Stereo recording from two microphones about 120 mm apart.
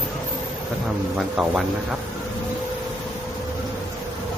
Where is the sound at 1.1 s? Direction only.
5° right (ahead or behind).